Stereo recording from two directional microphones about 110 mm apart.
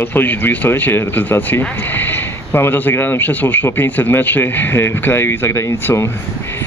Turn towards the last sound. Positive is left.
turn(degrees=25)  # may be behind; listen again after turning